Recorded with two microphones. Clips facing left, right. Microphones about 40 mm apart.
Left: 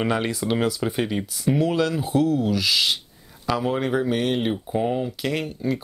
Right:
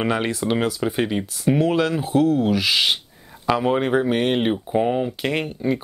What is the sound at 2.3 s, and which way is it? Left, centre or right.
Speech, right.